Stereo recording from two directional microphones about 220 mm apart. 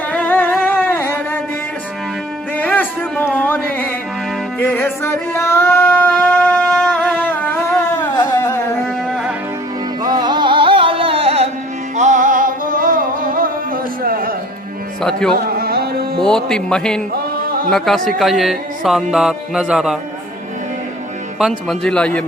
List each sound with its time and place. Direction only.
0.1 s music: 5° left (ahead or behind)
2.6 s music: 5° left (ahead or behind)
3.3 s carnatic music: 10° left (ahead or behind)
4.6 s music: 10° left (ahead or behind)
9.0 s music: centre (ahead or behind)
10.0 s music: 20° right (ahead or behind); by 14.3 s 40° right (ahead or behind)
15.4 s music: 45° right (ahead or behind)
16.2 s music: 5° left (ahead or behind)
21.3 s music: centre (ahead or behind)